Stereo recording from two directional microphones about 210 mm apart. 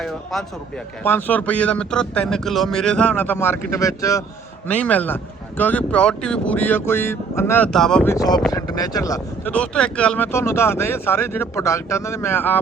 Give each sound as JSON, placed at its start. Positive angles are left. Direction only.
{"t": 0.0, "sound": "speech", "side_deg": 0}
{"t": 8.1, "sound": "speech", "side_deg": 15}